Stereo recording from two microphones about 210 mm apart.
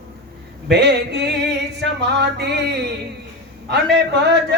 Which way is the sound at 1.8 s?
55° right (ahead or behind).